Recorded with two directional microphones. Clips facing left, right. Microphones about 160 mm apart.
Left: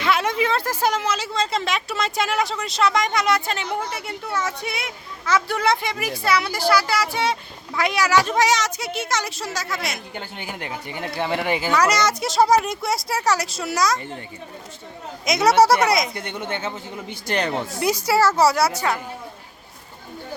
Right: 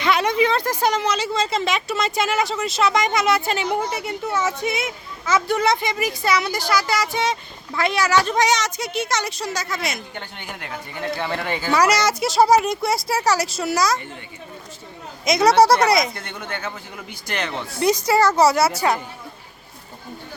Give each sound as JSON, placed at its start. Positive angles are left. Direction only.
{"t": 0.0, "sound": "a woman's voice", "side_deg": 5}
{"t": 11.7, "sound": "a woman's voice", "side_deg": -5}
{"t": 15.2, "sound": "a woman's voice", "side_deg": 0}
{"t": 16.1, "sound": "a man's voice", "side_deg": 20}
{"t": 17.7, "sound": "a woman's voice", "side_deg": 5}